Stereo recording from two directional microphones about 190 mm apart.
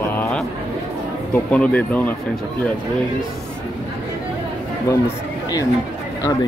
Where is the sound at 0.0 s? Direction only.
10° left (ahead or behind).